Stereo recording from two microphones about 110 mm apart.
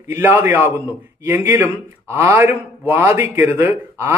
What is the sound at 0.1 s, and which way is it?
A man's voice, 15° right (ahead or behind).